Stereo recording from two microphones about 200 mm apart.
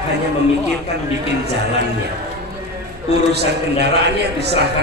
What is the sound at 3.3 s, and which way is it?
A man's voice, 55° right (ahead or behind).